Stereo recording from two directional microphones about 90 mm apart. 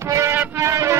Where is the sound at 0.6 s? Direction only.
35° right (ahead or behind).